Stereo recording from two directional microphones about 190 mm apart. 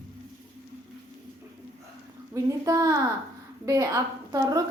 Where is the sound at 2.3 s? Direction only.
15° right (ahead or behind).